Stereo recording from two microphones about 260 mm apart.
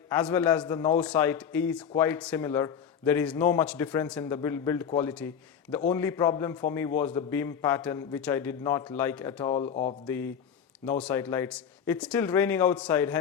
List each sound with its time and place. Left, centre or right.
0.1 s a man's voice: centre
9.6 s mantra: left
10.1 s a man's voice: centre